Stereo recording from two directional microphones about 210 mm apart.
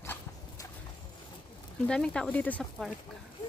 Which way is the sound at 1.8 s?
5° left (ahead or behind).